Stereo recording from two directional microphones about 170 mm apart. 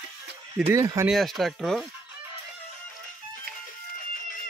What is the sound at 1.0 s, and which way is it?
Speech, centre (ahead or behind).